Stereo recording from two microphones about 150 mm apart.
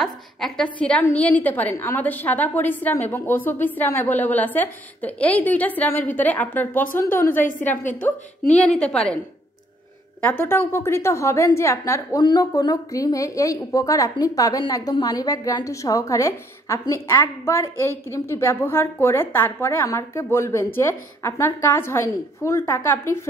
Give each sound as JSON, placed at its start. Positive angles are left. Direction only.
{"t": 0.0, "sound": "a woman's voice", "side_deg": 5}
{"t": 7.4, "sound": "a woman's voice", "side_deg": 60}
{"t": 7.9, "sound": "a woman's voice", "side_deg": 10}
{"t": 10.2, "sound": "a woman's voice", "side_deg": 15}